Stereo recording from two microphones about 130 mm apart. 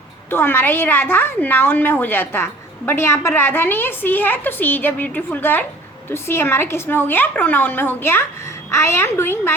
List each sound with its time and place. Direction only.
0.3 s a woman's voice: 15° left (ahead or behind)